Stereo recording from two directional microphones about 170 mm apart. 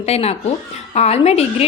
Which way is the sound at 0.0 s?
35° left (ahead or behind).